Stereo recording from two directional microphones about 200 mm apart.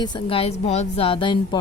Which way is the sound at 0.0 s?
25° left (ahead or behind).